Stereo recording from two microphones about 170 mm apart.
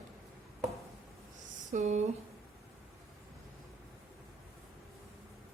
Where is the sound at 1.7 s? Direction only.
45° right (ahead or behind).